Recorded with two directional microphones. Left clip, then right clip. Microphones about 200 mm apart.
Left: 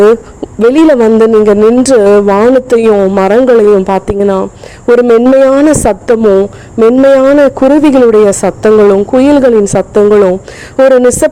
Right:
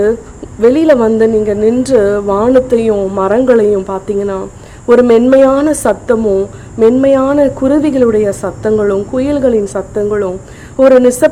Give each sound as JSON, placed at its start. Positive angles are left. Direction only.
{"t": 0.7, "sound": "a woman's voice", "side_deg": 35}